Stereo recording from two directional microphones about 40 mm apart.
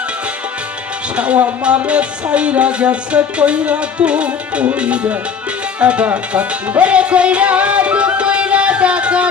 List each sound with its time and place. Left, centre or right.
1.1 s music: right